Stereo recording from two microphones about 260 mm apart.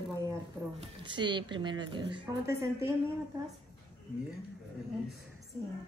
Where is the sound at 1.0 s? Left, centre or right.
Centre.